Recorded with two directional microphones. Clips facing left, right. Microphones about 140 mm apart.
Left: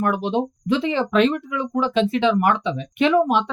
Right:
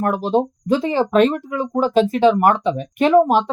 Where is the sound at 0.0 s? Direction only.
40° right (ahead or behind).